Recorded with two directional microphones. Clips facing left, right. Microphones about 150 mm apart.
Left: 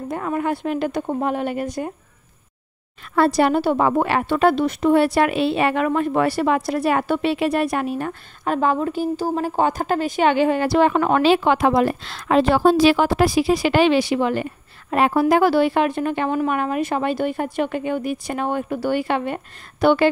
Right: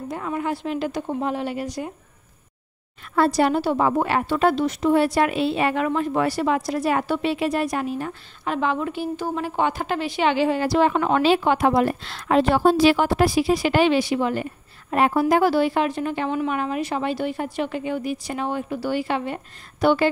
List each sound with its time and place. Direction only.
0.1 s a woman's voice: 55° left (ahead or behind)
3.2 s a woman's voice: 65° left (ahead or behind)